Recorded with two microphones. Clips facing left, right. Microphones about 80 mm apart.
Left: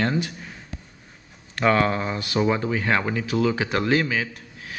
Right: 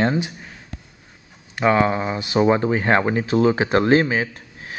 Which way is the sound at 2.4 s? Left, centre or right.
Right.